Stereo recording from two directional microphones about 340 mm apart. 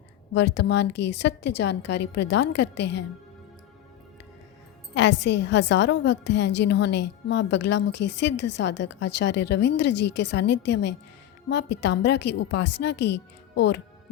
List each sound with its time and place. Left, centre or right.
0.3 s a woman's voice: left
4.9 s a woman's voice: left